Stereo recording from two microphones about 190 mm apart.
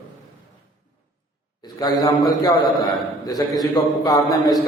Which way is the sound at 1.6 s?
20° left (ahead or behind).